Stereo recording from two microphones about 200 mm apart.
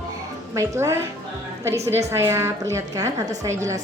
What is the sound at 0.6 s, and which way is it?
A woman's voice, 15° right (ahead or behind).